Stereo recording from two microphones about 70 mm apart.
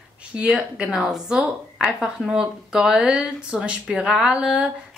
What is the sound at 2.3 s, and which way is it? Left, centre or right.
Speech, centre.